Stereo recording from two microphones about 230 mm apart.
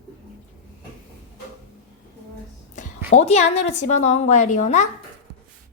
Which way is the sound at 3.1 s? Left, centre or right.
Left.